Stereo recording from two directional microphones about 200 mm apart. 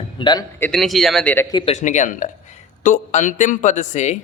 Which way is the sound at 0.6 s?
5° left (ahead or behind).